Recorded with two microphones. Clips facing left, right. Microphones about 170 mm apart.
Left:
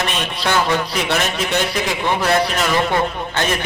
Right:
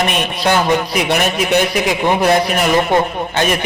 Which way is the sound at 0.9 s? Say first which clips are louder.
Right 4 dB; 15° right (ahead or behind).